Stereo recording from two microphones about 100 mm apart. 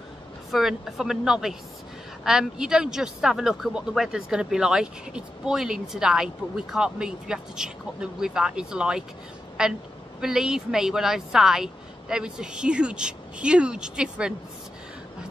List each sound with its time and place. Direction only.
0.5 s speech: centre (ahead or behind)